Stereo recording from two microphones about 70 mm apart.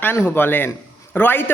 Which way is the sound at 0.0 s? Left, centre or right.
Left.